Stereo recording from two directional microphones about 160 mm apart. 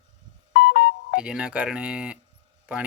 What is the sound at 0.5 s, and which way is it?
Ringtone, 70° left (ahead or behind).